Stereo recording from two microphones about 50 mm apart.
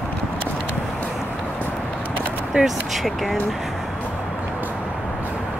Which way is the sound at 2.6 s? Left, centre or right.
Right.